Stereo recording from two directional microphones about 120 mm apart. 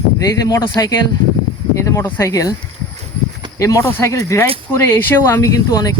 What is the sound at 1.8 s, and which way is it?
Speech, 25° left (ahead or behind).